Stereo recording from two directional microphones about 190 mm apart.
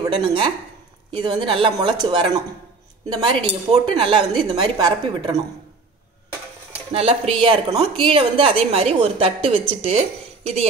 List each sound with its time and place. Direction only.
0.1 s a woman's voice: 25° right (ahead or behind)
6.9 s a woman's voice: 30° right (ahead or behind)